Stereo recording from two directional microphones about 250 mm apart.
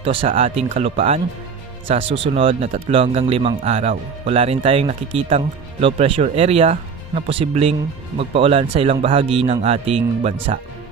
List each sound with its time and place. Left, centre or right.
0.0 s a man's voice: right